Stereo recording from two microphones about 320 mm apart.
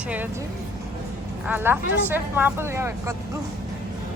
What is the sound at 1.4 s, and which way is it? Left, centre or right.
Speech, centre.